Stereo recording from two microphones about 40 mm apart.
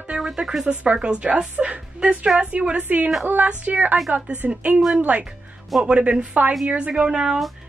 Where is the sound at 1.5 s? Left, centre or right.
Right.